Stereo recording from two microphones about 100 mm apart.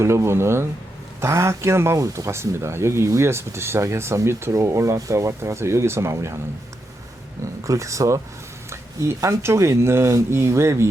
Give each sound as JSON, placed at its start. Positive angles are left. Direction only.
{"t": 0.0, "sound": "speech", "side_deg": -30}
{"t": 7.6, "sound": "speech", "side_deg": -30}